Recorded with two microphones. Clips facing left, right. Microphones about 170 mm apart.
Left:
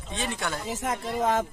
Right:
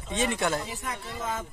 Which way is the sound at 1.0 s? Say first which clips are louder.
Left 11 dB; 90° left.